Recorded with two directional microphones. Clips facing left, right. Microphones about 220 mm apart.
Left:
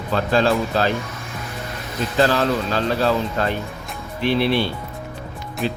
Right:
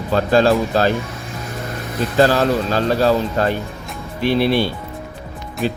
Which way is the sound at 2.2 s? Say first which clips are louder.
Right 2 dB; 40° right (ahead or behind).